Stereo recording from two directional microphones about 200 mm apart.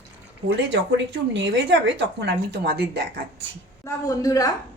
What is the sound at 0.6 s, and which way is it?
A woman's voice, 65° right (ahead or behind).